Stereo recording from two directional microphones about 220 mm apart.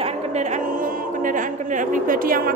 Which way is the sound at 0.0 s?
30° right (ahead or behind).